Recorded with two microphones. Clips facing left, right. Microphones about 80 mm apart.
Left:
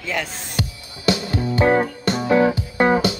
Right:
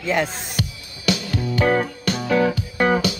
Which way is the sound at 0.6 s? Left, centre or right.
Left.